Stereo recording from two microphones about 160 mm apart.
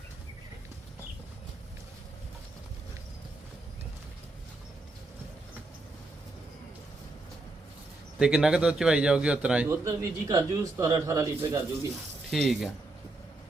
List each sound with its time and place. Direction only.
8.2 s speech: 5° right (ahead or behind)
9.6 s a man's voice: 20° right (ahead or behind)
12.3 s speech: centre (ahead or behind)